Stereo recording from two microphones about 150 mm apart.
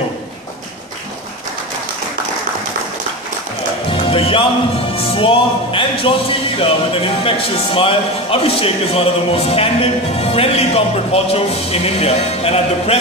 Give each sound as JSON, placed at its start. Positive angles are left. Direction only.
{"t": 3.9, "sound": "music", "side_deg": 35}
{"t": 4.9, "sound": "speech", "side_deg": 35}